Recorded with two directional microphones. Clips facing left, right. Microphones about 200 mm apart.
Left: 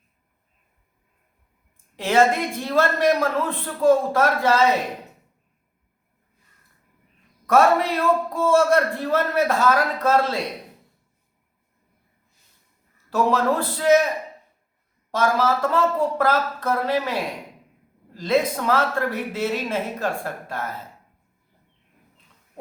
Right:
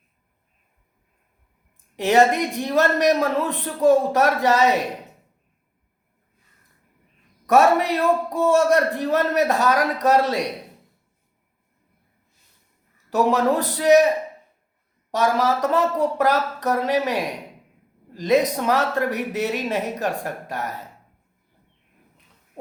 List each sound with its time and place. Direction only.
2.0 s a man's voice: 20° right (ahead or behind)
7.4 s a man's voice: 15° right (ahead or behind)
13.1 s a man's voice: 15° right (ahead or behind)
15.1 s a man's voice: 15° right (ahead or behind)